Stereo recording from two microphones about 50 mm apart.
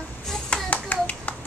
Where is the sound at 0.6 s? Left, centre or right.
Left.